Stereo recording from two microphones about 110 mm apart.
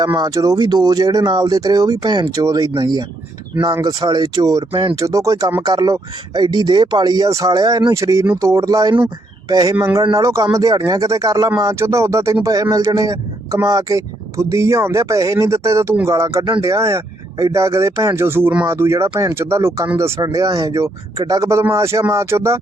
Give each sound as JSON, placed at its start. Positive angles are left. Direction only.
{"t": 0.0, "sound": "speech", "side_deg": -35}
{"t": 4.7, "sound": "speech", "side_deg": -50}
{"t": 4.9, "sound": "speech", "side_deg": -30}